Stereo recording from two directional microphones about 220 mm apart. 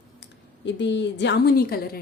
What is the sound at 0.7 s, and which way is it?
A woman's voice, 55° left (ahead or behind).